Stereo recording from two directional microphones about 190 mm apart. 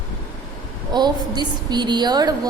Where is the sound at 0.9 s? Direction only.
20° right (ahead or behind).